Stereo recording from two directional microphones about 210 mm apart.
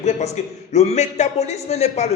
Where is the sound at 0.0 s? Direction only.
35° left (ahead or behind).